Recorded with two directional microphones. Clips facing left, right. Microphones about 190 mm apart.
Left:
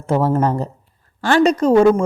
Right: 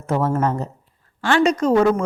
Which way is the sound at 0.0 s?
30° left (ahead or behind).